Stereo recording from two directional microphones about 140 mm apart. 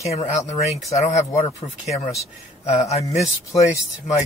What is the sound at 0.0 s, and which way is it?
Speech, 50° left (ahead or behind).